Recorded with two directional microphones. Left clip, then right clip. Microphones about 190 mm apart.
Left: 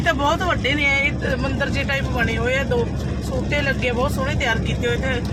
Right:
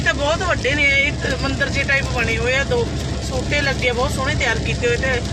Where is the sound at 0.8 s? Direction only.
15° left (ahead or behind).